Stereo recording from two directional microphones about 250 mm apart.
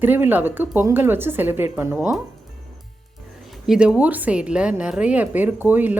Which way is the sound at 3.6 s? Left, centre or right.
Centre.